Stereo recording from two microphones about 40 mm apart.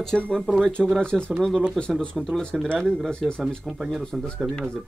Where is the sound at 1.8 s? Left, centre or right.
Centre.